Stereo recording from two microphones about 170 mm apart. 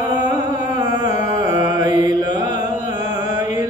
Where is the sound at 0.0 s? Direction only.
25° right (ahead or behind).